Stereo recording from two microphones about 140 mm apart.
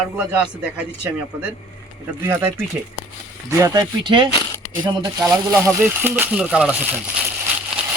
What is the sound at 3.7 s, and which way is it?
Speech, 30° right (ahead or behind).